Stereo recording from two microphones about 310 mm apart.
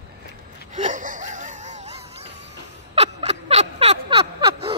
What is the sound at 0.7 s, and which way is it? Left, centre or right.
Music, right.